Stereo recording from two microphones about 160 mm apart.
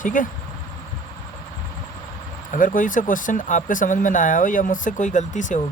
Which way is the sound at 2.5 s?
55° left (ahead or behind).